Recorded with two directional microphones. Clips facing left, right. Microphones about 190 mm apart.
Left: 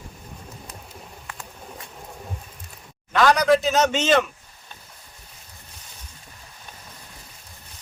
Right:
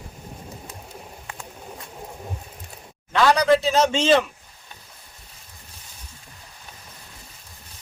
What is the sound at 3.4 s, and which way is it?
Speech, 30° right (ahead or behind).